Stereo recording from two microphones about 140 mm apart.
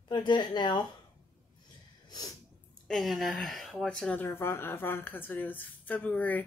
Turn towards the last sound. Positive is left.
turn(degrees=10)  # may be behind; listen again after turning